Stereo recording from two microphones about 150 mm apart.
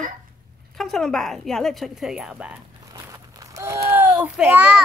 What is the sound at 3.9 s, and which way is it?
Speech, 15° right (ahead or behind).